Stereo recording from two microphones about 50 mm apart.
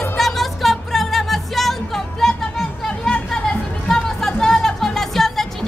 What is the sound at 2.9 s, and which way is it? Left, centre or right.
Music, left.